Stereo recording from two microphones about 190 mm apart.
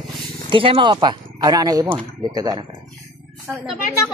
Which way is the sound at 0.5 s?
25° right (ahead or behind).